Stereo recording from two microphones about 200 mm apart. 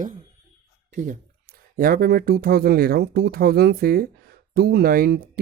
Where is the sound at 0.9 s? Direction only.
40° right (ahead or behind).